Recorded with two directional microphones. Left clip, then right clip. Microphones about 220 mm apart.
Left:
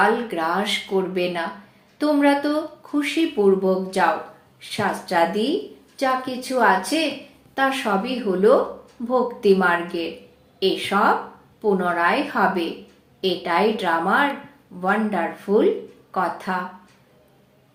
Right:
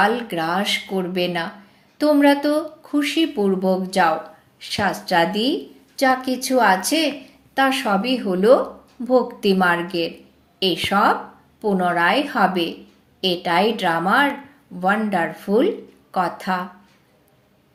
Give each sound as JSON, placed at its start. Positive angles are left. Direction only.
{"t": 0.0, "sound": "a woman's voice", "side_deg": -40}